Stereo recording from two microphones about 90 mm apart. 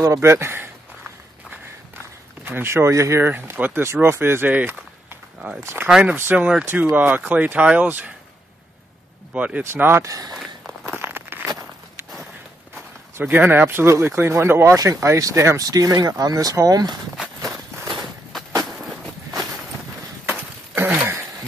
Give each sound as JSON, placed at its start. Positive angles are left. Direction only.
{"t": 0.0, "sound": "speech", "side_deg": -35}
{"t": 2.4, "sound": "speech", "side_deg": -25}
{"t": 5.9, "sound": "speech", "side_deg": -5}
{"t": 6.1, "sound": "speech", "side_deg": -20}
{"t": 9.3, "sound": "speech", "side_deg": -15}
{"t": 9.6, "sound": "speech", "side_deg": -25}
{"t": 10.0, "sound": "speech", "side_deg": -40}
{"t": 10.4, "sound": "a sound", "side_deg": 0}
{"t": 11.0, "sound": "a sound", "side_deg": -25}
{"t": 12.7, "sound": "speech", "side_deg": -20}
{"t": 17.2, "sound": "run", "side_deg": 0}
{"t": 18.7, "sound": "walk", "side_deg": 0}
{"t": 20.2, "sound": "a sound", "side_deg": -20}